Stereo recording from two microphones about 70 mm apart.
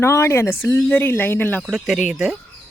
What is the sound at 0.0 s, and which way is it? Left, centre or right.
Speech, left.